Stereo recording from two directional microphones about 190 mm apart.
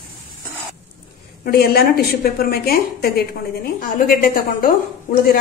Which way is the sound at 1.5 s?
55° left (ahead or behind).